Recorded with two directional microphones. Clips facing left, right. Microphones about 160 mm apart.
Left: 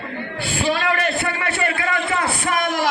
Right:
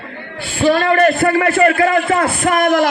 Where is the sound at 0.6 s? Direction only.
45° right (ahead or behind).